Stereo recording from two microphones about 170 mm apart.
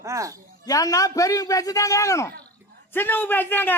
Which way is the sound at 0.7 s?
20° left (ahead or behind).